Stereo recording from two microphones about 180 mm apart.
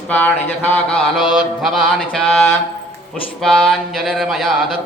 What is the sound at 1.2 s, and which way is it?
Mantra, 25° left (ahead or behind).